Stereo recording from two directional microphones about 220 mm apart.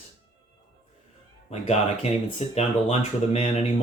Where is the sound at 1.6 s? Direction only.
30° left (ahead or behind).